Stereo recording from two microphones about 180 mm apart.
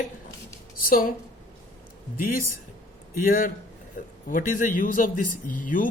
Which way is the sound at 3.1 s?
50° left (ahead or behind).